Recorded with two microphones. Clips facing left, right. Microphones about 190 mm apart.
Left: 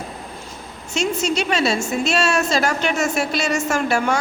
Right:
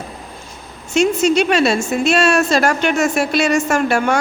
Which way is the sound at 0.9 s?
55° right (ahead or behind).